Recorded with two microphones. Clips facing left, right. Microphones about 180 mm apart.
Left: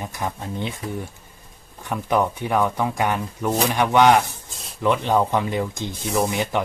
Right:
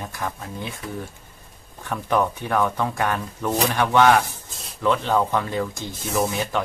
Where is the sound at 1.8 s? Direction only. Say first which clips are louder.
Left 1 dB; 15° left (ahead or behind).